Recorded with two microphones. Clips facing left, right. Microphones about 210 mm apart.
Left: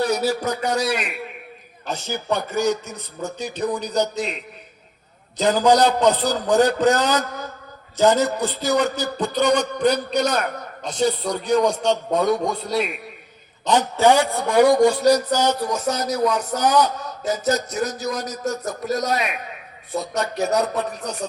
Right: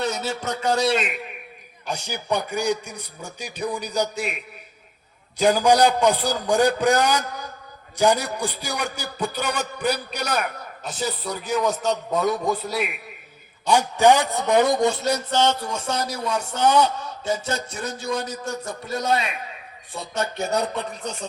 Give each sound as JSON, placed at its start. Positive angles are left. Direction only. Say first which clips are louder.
{"t": 0.0, "sound": "a man's voice", "louder": "left 5 dB", "side_deg": -25}